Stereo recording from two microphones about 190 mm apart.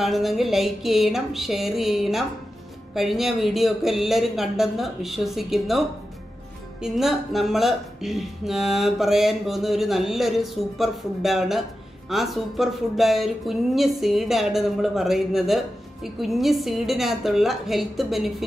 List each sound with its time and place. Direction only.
0.0 s speech: centre (ahead or behind)